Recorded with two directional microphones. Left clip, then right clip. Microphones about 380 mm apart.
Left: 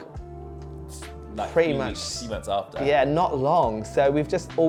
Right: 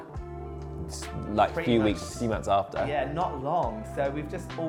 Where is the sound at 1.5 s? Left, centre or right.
Left.